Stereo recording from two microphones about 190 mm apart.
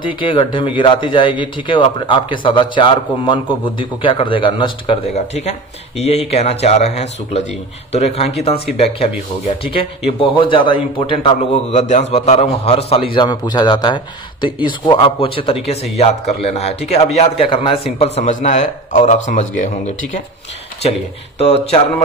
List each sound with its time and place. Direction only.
0.0 s a man's voice: 25° left (ahead or behind); by 19.7 s 40° left (ahead or behind)
21.4 s a man's voice: 35° left (ahead or behind)